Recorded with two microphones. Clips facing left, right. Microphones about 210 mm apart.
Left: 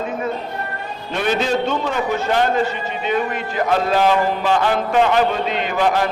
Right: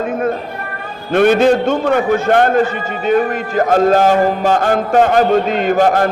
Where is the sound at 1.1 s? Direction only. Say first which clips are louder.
Right 9 dB; 55° right (ahead or behind).